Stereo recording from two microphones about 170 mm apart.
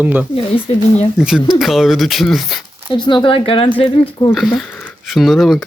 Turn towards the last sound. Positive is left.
turn(degrees=0)  # may be behind; listen again after turning